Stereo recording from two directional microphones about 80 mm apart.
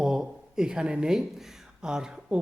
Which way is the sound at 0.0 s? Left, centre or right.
Centre.